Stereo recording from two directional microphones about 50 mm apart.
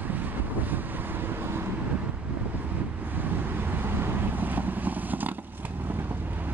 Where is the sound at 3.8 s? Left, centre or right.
Right.